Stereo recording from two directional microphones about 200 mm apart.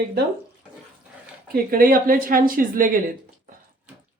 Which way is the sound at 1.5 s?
45° right (ahead or behind).